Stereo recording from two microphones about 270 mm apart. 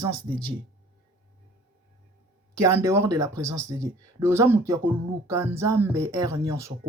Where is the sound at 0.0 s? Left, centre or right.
Centre.